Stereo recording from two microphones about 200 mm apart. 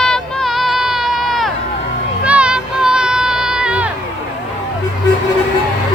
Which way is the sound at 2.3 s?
5° right (ahead or behind).